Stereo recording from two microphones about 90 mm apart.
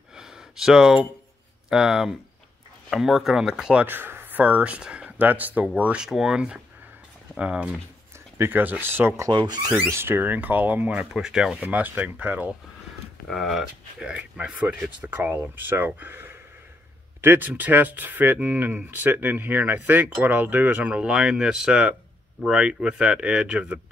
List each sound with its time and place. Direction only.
0.1 s a sound: 5° right (ahead or behind)
1.7 s speech: 5° right (ahead or behind)
3.8 s speech: 20° right (ahead or behind)
9.3 s speech: 60° right (ahead or behind)
9.7 s speech: 35° right (ahead or behind); by 12.5 s 20° right (ahead or behind)
13.3 s speech: centre (ahead or behind)